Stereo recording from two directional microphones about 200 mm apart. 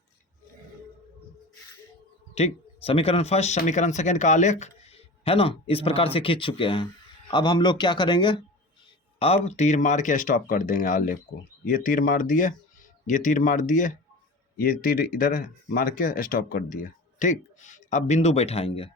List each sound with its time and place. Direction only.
2.3 s speech: 30° left (ahead or behind)